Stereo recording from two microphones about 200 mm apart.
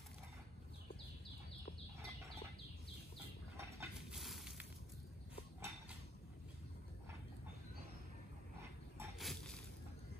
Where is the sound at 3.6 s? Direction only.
15° right (ahead or behind).